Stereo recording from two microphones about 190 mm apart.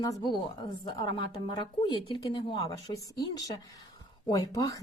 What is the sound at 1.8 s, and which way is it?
Speech, 25° left (ahead or behind).